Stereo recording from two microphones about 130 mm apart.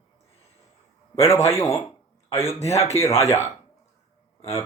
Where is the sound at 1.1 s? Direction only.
20° left (ahead or behind).